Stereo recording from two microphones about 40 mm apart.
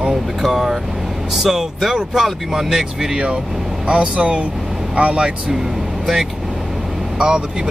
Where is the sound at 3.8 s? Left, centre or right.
Right.